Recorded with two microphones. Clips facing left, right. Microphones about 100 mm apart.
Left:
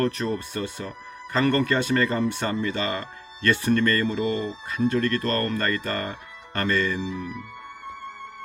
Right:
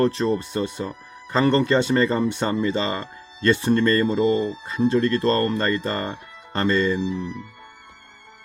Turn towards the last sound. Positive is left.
turn(degrees=55)  # may be behind; listen again after turning